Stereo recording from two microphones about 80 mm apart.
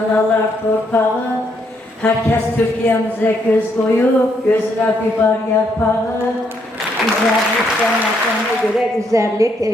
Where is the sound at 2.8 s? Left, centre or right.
Centre.